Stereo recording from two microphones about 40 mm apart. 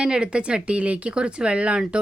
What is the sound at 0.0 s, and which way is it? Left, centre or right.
Speech, right.